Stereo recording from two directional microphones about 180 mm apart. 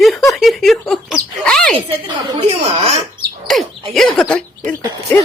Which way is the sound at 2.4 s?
35° right (ahead or behind).